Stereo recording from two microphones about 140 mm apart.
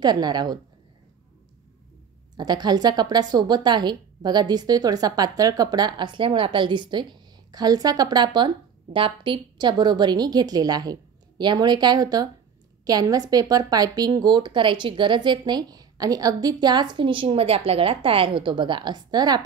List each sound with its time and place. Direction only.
0.0 s a woman's voice: 30° right (ahead or behind)
2.3 s a woman's voice: 30° right (ahead or behind)